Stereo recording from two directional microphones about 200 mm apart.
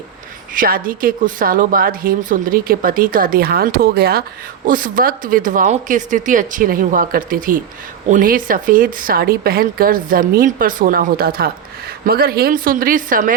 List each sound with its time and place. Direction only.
0.5 s a woman's voice: 45° right (ahead or behind)